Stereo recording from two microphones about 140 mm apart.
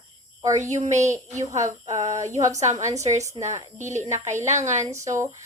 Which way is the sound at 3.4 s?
45° right (ahead or behind).